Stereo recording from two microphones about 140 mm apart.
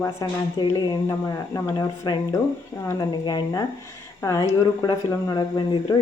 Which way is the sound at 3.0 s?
30° left (ahead or behind).